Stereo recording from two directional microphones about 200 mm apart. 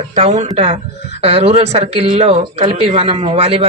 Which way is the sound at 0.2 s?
35° right (ahead or behind).